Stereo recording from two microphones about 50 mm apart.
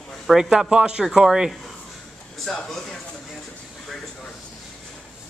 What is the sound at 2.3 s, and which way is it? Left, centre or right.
Speech, centre.